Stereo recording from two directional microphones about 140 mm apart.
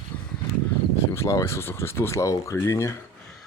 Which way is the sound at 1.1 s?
20° left (ahead or behind).